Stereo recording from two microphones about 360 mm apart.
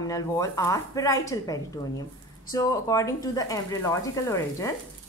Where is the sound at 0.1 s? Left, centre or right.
Centre.